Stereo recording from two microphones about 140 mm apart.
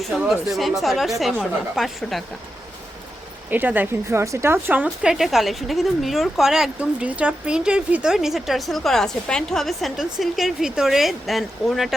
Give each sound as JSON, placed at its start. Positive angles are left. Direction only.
{"t": 0.0, "sound": "a woman's voice", "side_deg": -5}
{"t": 3.5, "sound": "a woman's voice", "side_deg": -15}